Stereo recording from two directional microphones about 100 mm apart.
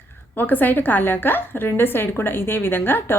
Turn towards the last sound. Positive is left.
turn(degrees=20)  # may be behind; listen again after turning